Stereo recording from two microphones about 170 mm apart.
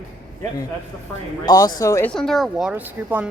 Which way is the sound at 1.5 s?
20° left (ahead or behind).